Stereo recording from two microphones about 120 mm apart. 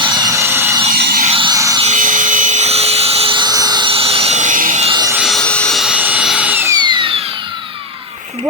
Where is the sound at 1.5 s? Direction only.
25° right (ahead or behind).